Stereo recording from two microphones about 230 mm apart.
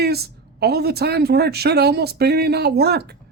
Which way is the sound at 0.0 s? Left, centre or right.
Right.